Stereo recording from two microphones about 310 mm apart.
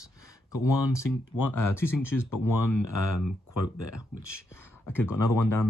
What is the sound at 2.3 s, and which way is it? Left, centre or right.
Speech, left.